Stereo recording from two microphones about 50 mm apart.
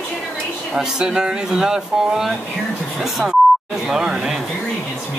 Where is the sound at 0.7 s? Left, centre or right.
Centre.